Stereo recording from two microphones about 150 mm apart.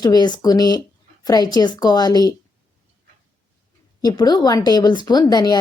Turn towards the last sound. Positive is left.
turn(degrees=25)  # may be behind; listen again after turning